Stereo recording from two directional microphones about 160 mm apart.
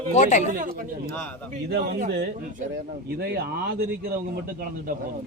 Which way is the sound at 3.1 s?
90° right.